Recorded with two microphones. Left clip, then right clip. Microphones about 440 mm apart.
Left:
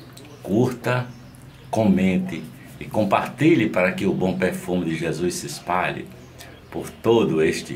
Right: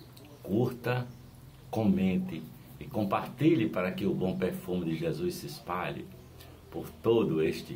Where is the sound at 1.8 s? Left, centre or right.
Right.